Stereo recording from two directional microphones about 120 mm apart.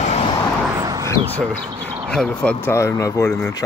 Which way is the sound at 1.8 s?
55° right (ahead or behind).